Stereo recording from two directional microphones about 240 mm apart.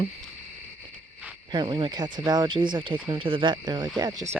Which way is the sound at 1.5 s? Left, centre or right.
Centre.